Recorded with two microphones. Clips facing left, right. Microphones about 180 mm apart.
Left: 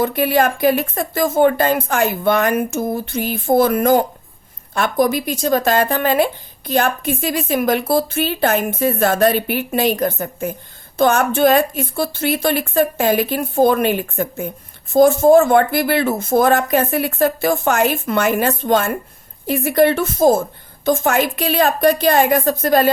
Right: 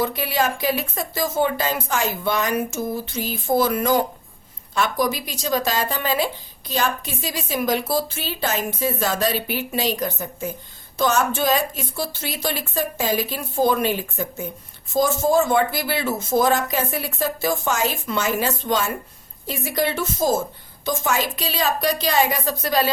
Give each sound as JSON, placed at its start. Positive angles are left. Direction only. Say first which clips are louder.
{"t": 0.0, "sound": "a woman's voice", "louder": "left 6 dB", "side_deg": 55}